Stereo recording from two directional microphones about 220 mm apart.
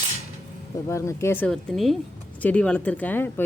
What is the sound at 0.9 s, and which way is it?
Speech, 15° left (ahead or behind).